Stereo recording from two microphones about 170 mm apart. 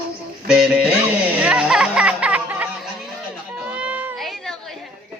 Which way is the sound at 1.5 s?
5° right (ahead or behind).